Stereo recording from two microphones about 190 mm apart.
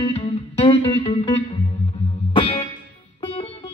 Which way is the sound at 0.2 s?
30° left (ahead or behind).